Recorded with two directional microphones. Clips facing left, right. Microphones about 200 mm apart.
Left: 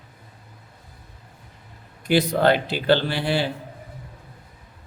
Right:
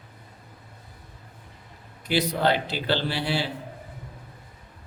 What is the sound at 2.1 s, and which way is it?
A man's voice, 50° left (ahead or behind).